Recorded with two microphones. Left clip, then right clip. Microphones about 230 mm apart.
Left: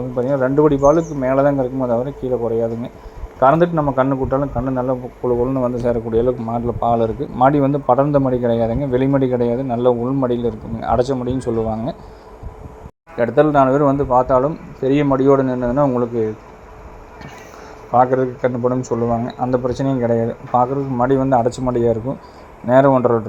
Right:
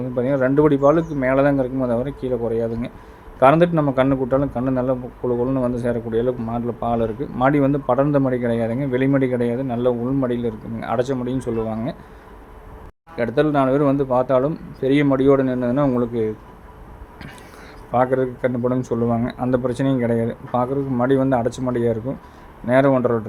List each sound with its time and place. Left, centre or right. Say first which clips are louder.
0.2 s speech: left 2 dB; centre
3.4 s a man's voice: left 1 dB; centre
13.4 s a man's voice: left 4 dB; centre
17.9 s a man's voice: left 4 dB; centre